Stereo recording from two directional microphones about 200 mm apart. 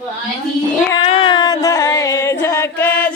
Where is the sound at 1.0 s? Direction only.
25° left (ahead or behind).